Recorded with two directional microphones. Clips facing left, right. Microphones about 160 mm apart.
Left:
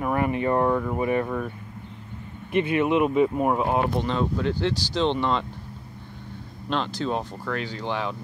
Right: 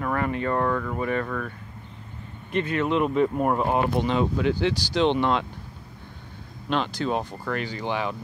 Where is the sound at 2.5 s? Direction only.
10° left (ahead or behind).